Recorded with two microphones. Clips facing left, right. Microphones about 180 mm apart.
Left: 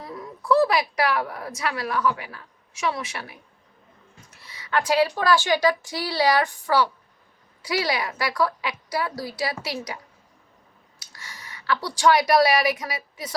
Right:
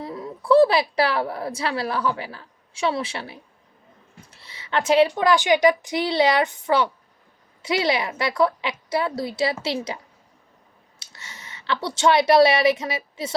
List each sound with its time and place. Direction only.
0.0 s a woman's voice: 25° right (ahead or behind)
11.0 s a woman's voice: 25° right (ahead or behind)